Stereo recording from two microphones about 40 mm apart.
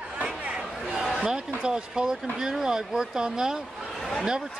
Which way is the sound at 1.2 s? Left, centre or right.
Right.